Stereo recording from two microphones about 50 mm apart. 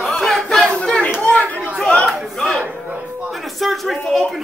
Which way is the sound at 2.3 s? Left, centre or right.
Centre.